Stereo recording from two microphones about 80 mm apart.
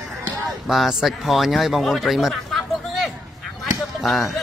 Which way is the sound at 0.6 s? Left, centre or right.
Centre.